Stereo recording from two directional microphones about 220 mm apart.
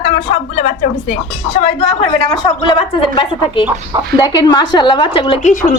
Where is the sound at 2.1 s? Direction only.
20° left (ahead or behind).